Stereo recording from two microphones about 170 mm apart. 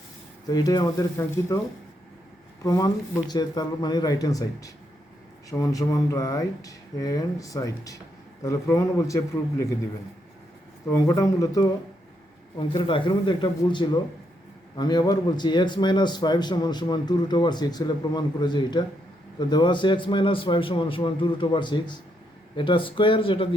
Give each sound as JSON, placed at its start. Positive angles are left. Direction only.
{"t": 0.4, "sound": "a man's voice", "side_deg": 20}
{"t": 2.6, "sound": "a man's voice", "side_deg": 20}
{"t": 10.8, "sound": "a man's voice", "side_deg": 20}